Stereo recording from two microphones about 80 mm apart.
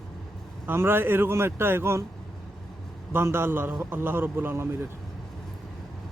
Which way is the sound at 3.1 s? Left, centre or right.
Right.